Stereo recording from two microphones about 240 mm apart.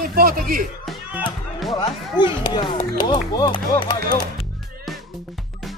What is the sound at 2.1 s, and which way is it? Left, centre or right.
Speech, centre.